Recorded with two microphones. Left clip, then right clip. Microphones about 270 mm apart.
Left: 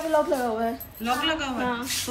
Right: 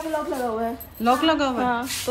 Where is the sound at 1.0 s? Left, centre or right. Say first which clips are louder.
Right 6 dB; centre.